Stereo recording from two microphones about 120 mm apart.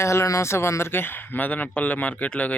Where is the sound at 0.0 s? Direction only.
25° left (ahead or behind).